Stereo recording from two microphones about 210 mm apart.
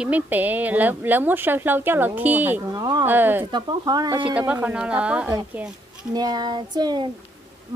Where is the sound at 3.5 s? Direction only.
20° right (ahead or behind).